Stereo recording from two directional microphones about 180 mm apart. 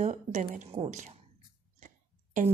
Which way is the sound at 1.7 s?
45° right (ahead or behind).